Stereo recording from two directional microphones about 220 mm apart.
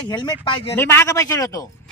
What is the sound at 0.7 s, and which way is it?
Speech, 10° left (ahead or behind).